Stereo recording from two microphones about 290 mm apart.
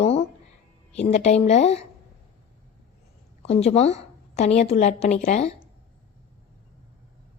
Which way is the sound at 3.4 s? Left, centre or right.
Left.